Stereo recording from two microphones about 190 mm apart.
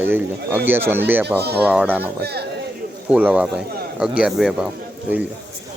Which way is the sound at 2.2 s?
60° right (ahead or behind).